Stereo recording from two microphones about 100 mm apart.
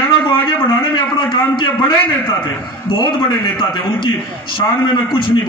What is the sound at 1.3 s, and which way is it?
A man's voice, 55° left (ahead or behind).